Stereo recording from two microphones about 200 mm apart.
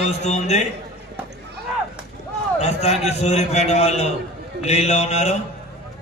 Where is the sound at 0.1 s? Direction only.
35° left (ahead or behind).